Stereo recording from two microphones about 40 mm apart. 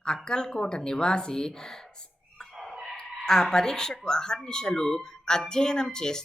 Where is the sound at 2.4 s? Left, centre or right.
Centre.